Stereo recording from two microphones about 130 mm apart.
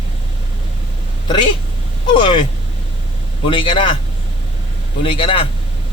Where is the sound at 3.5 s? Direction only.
40° left (ahead or behind).